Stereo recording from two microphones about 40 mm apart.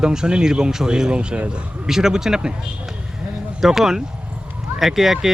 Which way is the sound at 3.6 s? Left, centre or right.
Centre.